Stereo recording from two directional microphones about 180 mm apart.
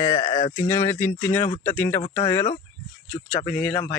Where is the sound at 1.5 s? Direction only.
35° left (ahead or behind).